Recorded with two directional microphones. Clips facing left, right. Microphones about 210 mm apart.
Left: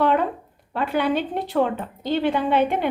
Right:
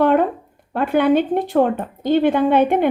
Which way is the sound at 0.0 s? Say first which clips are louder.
Right 5 dB; 50° right (ahead or behind).